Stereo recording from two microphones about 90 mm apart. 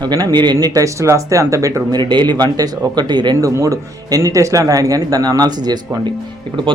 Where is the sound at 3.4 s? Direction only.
40° right (ahead or behind).